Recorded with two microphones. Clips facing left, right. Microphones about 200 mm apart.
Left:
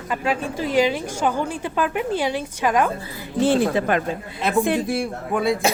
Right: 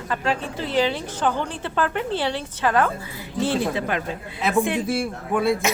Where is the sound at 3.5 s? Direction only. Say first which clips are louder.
Left 5 dB; 50° left (ahead or behind).